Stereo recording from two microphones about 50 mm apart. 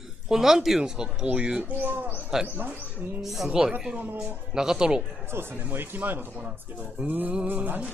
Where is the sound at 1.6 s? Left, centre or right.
Right.